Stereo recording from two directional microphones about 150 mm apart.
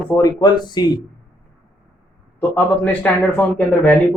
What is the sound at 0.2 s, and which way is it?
Speech, 25° left (ahead or behind).